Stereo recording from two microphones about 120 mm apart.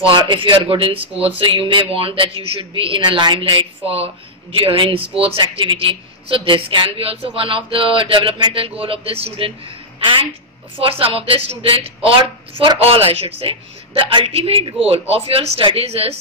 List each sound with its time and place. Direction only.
0.0 s a woman's voice: 40° right (ahead or behind)